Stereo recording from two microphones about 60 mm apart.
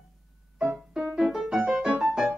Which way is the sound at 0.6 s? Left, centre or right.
Centre.